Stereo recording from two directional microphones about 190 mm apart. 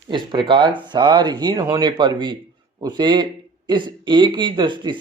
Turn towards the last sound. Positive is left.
turn(degrees=-25)  # may be behind; listen again after turning